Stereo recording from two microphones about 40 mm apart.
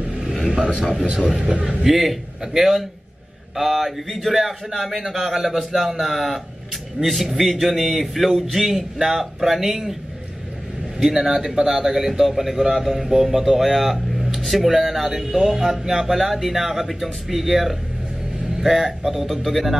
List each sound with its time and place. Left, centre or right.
0.2 s vehicle: centre
0.5 s speech: centre
1.4 s speech: right
1.8 s a man's voice: centre
11.1 s a man's voice: centre